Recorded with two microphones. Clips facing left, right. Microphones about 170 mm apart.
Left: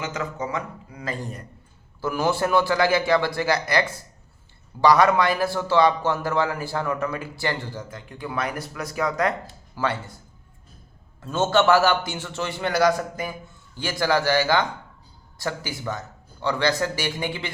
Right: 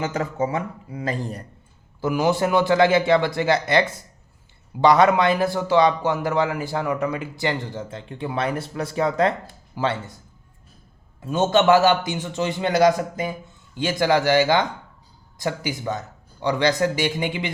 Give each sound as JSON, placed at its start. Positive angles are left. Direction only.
{"t": 0.0, "sound": "speech", "side_deg": -35}
{"t": 2.0, "sound": "a man's voice", "side_deg": -15}
{"t": 11.2, "sound": "a man's voice", "side_deg": -15}